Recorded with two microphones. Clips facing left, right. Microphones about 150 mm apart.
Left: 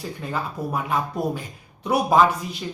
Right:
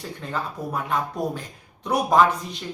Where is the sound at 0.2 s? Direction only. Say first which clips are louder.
Left 1 dB; 10° left (ahead or behind).